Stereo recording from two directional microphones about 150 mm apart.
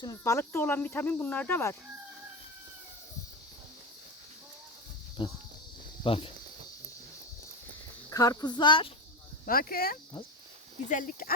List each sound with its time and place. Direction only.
0.0 s speech: 20° left (ahead or behind)
5.2 s speech: 30° left (ahead or behind)
8.1 s speech: 25° left (ahead or behind)
9.5 s speech: 75° left (ahead or behind)
10.8 s speech: 65° left (ahead or behind)